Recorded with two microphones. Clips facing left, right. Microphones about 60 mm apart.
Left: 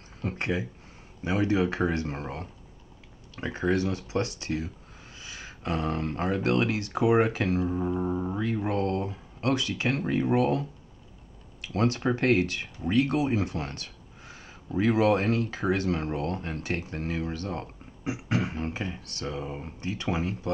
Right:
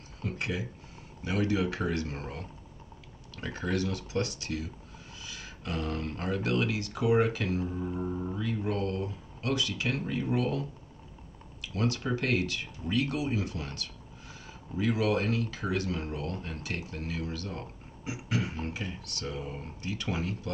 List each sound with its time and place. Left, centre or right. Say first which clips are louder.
0.2 s a sound: left 4 dB; left
1.2 s speech: left 4 dB; left
11.6 s speech: left 5 dB; left
19.2 s speech: left 4 dB; centre